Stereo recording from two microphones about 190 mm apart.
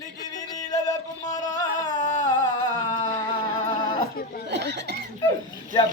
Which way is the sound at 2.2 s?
20° left (ahead or behind).